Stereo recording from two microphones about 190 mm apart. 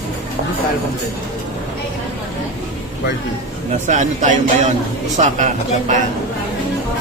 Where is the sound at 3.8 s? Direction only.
40° right (ahead or behind).